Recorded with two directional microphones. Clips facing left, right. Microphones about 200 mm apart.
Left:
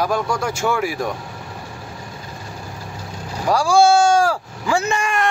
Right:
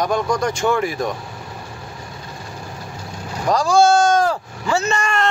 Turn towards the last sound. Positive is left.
turn(degrees=15)  # may be behind; listen again after turning